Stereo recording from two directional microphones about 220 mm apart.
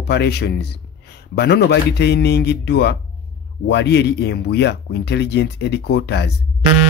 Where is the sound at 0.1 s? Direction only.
50° left (ahead or behind).